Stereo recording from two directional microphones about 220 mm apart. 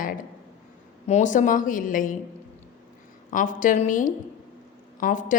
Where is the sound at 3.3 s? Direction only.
35° left (ahead or behind).